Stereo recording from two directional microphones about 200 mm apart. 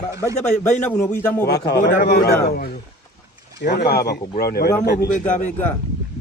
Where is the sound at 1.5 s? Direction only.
50° left (ahead or behind).